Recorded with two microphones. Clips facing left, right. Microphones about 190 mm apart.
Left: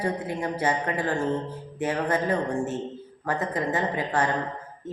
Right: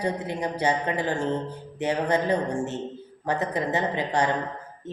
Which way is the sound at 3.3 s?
20° right (ahead or behind).